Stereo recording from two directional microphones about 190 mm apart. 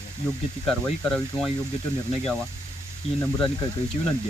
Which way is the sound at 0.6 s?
5° left (ahead or behind).